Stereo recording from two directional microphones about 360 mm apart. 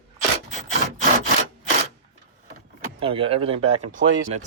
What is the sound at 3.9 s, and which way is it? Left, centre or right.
Speech, right.